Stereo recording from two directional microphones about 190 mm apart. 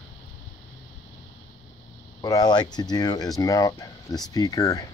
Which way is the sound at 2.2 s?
20° left (ahead or behind).